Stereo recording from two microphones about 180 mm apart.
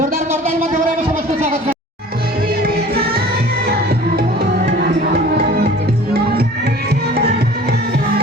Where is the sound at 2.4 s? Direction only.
55° right (ahead or behind).